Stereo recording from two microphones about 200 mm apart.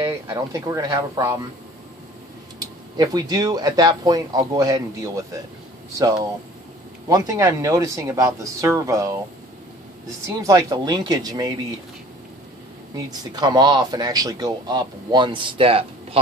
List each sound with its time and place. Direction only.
0.0 s speech: 15° right (ahead or behind)
2.6 s speech: 20° right (ahead or behind)
12.9 s speech: 20° right (ahead or behind)